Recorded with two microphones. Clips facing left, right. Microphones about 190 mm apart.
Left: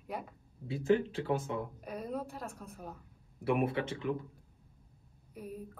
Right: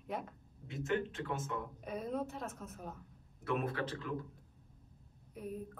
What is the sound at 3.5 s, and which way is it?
Speech, 20° left (ahead or behind).